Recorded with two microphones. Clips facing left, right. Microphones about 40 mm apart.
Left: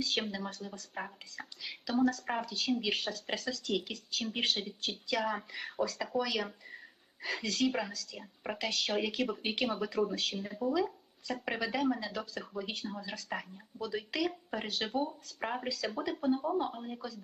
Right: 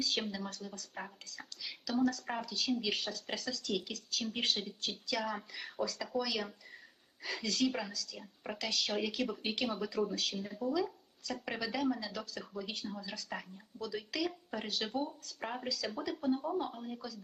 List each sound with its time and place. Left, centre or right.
0.0 s a woman's voice: centre